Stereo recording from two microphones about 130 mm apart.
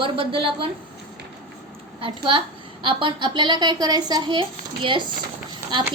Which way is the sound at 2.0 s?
45° right (ahead or behind).